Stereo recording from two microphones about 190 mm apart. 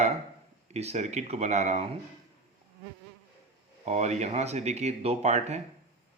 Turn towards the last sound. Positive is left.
turn(degrees=-35)  # may be behind; listen again after turning